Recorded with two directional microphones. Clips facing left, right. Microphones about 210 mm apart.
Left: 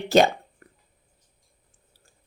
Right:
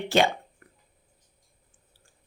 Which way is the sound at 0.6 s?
35° left (ahead or behind).